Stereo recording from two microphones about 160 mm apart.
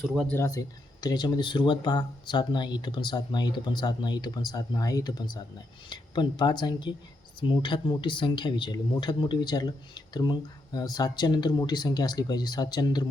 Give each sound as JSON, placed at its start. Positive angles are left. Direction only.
{"t": 0.0, "sound": "speech", "side_deg": 0}
{"t": 0.3, "sound": "speech", "side_deg": 15}